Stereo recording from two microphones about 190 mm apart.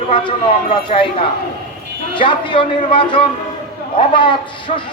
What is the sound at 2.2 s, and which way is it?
Speech, 25° left (ahead or behind).